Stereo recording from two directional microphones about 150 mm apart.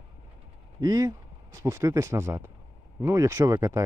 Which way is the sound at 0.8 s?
25° right (ahead or behind).